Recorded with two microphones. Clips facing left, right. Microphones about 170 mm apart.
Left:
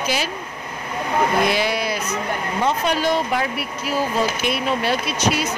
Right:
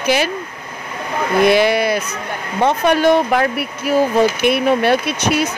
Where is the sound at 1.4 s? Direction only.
60° right (ahead or behind).